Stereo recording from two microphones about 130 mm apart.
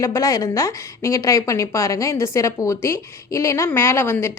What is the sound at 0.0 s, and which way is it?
A woman's voice, 25° left (ahead or behind).